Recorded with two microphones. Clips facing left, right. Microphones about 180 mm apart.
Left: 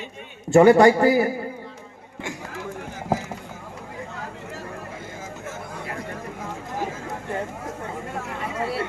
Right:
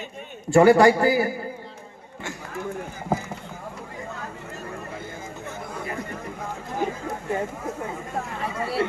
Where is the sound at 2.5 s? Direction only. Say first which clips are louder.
Right 2 dB; 90° left.